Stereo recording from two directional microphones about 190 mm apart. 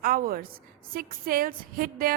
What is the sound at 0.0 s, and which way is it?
Music, 50° right (ahead or behind).